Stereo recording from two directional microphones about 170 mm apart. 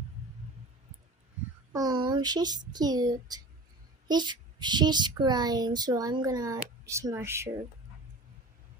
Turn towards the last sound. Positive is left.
turn(degrees=-15)  # may be behind; listen again after turning